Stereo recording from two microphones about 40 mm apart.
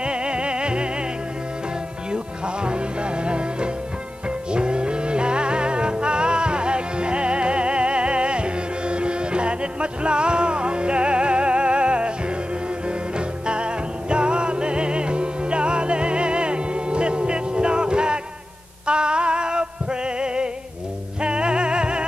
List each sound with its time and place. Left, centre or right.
0.0 s music: right
2.0 s music: right
13.5 s music: right